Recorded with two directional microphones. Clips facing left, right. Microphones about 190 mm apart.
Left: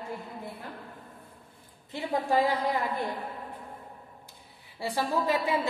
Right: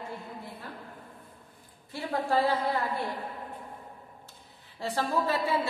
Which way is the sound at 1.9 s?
15° left (ahead or behind).